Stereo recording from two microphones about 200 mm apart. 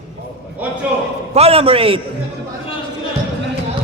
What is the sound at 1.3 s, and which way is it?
Speech, 30° right (ahead or behind).